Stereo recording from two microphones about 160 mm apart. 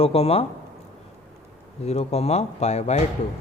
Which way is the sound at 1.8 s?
40° left (ahead or behind).